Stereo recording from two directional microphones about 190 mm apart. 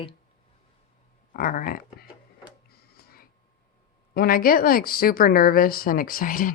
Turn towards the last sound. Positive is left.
turn(degrees=45)  # may be behind; listen again after turning